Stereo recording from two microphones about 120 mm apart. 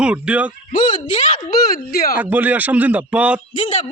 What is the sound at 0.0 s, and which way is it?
Speech, 10° right (ahead or behind).